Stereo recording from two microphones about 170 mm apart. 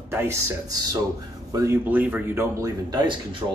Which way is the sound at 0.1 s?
20° right (ahead or behind).